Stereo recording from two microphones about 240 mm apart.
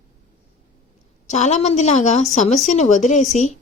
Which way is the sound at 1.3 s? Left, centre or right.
Left.